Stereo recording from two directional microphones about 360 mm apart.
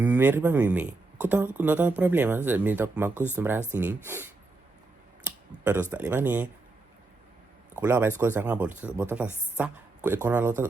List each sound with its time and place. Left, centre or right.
0.0 s speech: centre
5.2 s a sound: centre
5.9 s speech: centre
7.8 s speech: centre